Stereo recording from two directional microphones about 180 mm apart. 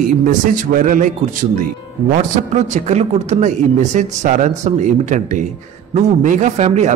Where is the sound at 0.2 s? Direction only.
50° right (ahead or behind).